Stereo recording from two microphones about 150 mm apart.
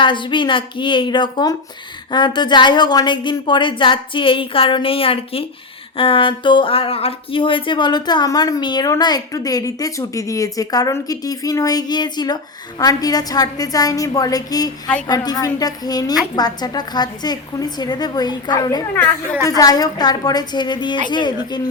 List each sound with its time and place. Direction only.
0.0 s a woman's voice: 35° left (ahead or behind)